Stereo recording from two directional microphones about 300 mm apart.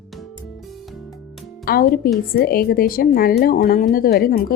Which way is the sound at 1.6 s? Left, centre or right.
Left.